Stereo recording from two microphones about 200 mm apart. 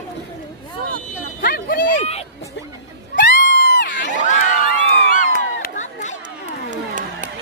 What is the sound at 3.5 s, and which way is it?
Crowd, 60° left (ahead or behind).